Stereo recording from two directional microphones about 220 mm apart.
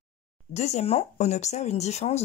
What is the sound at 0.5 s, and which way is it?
Speech, 30° left (ahead or behind).